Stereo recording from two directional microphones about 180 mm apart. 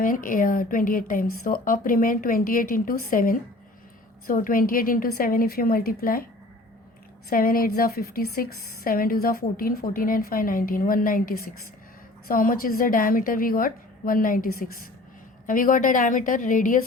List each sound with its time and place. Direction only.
0.0 s a woman's voice: 50° left (ahead or behind)
7.3 s a woman's voice: 55° left (ahead or behind)